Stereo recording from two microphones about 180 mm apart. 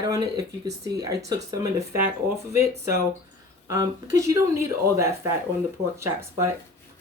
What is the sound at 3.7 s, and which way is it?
Speech, 15° right (ahead or behind).